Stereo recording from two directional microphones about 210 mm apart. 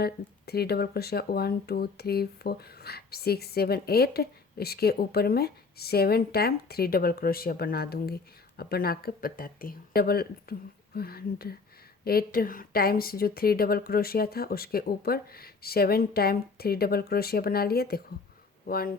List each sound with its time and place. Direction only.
0.0 s speech: 50° left (ahead or behind)